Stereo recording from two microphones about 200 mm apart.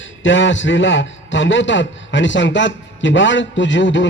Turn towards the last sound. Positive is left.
turn(degrees=65)  # may be behind; listen again after turning